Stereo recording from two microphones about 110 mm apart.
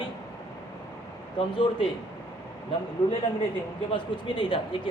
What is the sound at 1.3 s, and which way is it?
Speech, 45° left (ahead or behind).